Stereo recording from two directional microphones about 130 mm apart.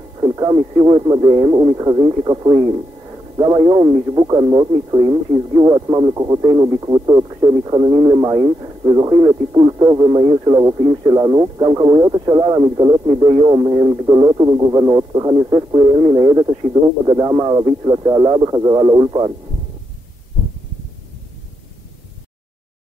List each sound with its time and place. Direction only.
0.2 s a man's voice: 30° right (ahead or behind)